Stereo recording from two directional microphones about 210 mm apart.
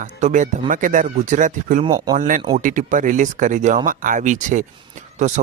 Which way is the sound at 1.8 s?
20° right (ahead or behind).